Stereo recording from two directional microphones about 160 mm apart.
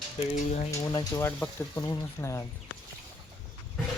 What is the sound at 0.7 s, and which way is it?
Speech, 20° left (ahead or behind).